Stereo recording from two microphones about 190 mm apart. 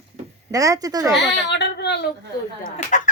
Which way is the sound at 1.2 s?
65° left (ahead or behind).